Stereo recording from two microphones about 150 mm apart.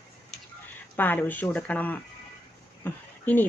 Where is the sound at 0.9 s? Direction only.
10° left (ahead or behind).